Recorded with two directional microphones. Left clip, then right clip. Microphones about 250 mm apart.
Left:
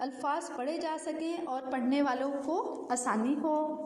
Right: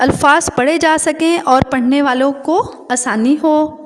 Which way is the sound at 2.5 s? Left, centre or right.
Right.